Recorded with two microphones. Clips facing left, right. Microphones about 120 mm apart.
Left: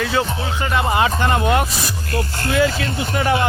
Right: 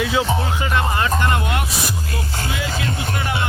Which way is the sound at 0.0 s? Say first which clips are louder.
Even; 10° right (ahead or behind).